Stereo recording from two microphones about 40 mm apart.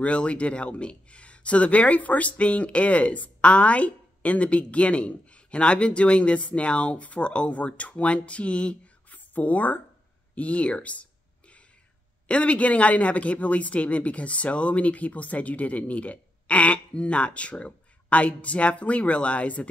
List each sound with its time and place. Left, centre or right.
0.0 s speech: left
9.1 s a sound: left
10.3 s speech: left
12.3 s speech: left